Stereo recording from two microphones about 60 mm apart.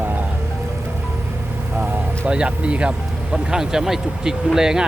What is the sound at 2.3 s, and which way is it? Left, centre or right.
Speech, centre.